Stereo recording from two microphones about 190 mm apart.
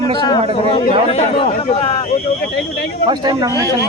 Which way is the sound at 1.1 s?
30° left (ahead or behind).